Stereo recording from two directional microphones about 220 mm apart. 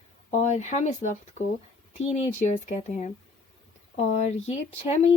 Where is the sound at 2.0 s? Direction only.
30° left (ahead or behind).